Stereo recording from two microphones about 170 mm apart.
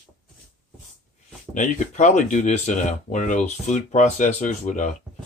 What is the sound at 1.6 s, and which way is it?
Speech, 45° left (ahead or behind).